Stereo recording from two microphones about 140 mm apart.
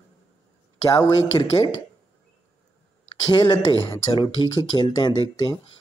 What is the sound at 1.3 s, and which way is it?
Speech, 30° left (ahead or behind).